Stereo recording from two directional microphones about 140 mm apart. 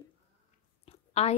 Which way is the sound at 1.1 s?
50° left (ahead or behind).